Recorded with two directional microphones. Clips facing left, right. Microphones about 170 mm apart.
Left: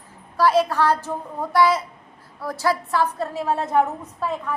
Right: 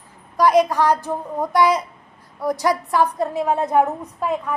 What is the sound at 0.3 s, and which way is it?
A woman's voice, 15° right (ahead or behind).